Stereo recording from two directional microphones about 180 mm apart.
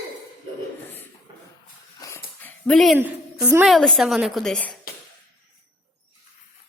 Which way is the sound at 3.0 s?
10° right (ahead or behind).